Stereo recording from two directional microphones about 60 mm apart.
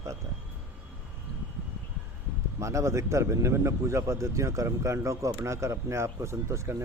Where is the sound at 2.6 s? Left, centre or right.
Right.